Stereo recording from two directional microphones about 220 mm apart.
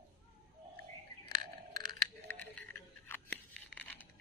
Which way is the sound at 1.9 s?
10° left (ahead or behind).